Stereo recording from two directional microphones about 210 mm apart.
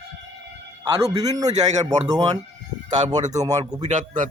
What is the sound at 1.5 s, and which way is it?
Speech, 35° right (ahead or behind).